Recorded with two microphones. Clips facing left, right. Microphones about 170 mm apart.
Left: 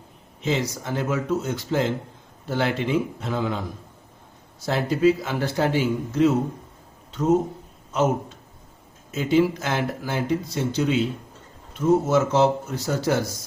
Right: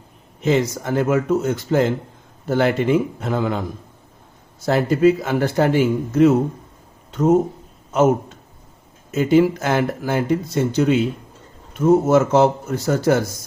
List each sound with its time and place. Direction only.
0.4 s speech: 50° right (ahead or behind)
4.6 s speech: 50° right (ahead or behind)
9.1 s speech: 50° right (ahead or behind)